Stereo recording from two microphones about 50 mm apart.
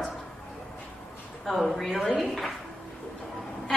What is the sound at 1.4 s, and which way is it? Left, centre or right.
A woman's voice, centre.